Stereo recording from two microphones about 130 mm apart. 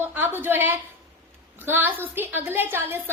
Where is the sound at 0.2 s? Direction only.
15° right (ahead or behind).